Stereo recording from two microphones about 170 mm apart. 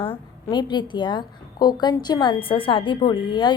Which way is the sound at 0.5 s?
25° left (ahead or behind).